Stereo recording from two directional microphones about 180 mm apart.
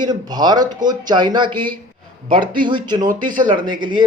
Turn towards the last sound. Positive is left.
turn(degrees=-25)  # may be behind; listen again after turning